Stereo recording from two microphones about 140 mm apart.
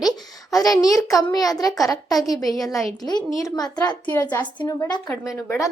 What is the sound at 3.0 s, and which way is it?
A child's voice, 30° left (ahead or behind).